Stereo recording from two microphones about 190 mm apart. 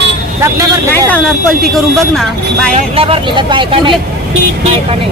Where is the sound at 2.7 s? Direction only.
30° right (ahead or behind).